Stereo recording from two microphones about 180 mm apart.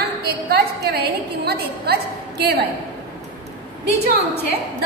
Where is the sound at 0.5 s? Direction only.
60° right (ahead or behind).